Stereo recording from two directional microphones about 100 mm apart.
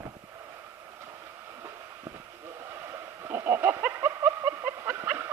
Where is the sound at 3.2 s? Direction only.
25° right (ahead or behind).